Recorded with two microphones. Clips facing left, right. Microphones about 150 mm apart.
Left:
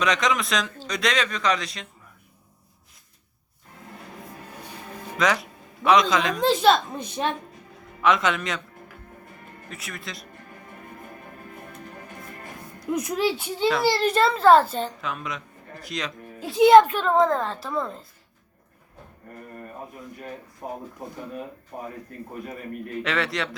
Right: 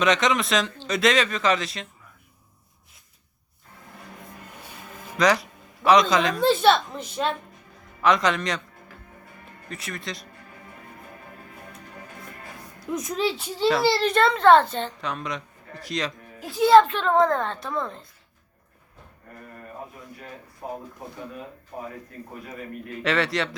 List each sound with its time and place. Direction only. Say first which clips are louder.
0.0 s a child's voice: right 2 dB; centre (ahead or behind)
5.1 s speech: right 3 dB; centre (ahead or behind)
6.9 s a woman's voice: even; 15° left (ahead or behind)
8.0 s a child's voice: right 1 dB; centre (ahead or behind)
9.6 s a child's voice: right 4 dB; centre (ahead or behind)
12.9 s a woman's voice: left 2 dB; 10° left (ahead or behind)
16.4 s a child's voice: left 2 dB; 20° left (ahead or behind); by 18.0 s 5° left (ahead or behind)
23.0 s a child's voice: right 3 dB; centre (ahead or behind)